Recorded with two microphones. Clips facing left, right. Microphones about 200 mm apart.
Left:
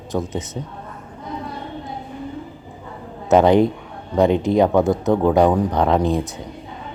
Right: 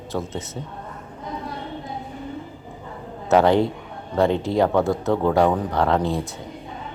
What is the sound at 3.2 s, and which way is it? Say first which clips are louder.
A man's voice: left 3 dB; 15° left (ahead or behind).